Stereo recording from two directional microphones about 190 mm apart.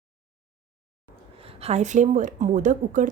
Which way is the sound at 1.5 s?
35° right (ahead or behind).